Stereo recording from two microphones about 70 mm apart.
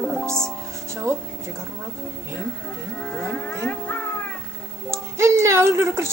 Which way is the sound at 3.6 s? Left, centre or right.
Left.